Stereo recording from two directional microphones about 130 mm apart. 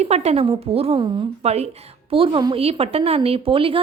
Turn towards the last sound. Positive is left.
turn(degrees=-45)  # may be behind; listen again after turning